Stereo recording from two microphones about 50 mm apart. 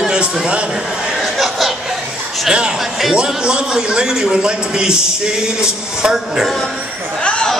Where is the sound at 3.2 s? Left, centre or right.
Centre.